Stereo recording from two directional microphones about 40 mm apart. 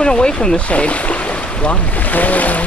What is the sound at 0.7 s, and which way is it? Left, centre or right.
Speech, left.